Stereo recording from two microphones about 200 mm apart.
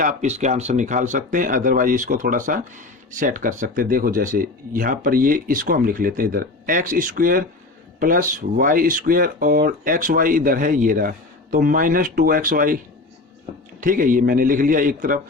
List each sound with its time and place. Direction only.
0.0 s speech: 35° right (ahead or behind)
13.8 s speech: 45° right (ahead or behind)